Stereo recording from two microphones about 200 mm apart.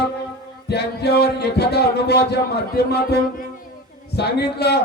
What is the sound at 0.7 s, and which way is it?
A man's voice, 55° left (ahead or behind).